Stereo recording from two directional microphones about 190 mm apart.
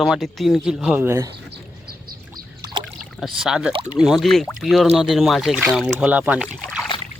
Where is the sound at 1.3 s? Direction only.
55° right (ahead or behind).